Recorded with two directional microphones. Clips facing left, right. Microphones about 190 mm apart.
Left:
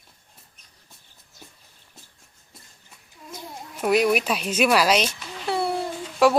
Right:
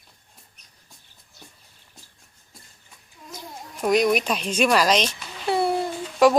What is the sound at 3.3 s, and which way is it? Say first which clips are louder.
Speech: left 1 dB; 5° left (ahead or behind).